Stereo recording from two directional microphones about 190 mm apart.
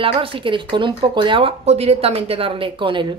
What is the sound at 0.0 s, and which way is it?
Speech, 30° right (ahead or behind).